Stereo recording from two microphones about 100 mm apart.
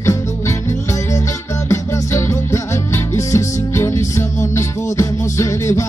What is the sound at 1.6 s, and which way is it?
Music, 30° left (ahead or behind).